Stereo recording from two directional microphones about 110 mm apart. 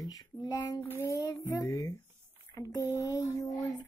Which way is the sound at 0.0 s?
35° left (ahead or behind).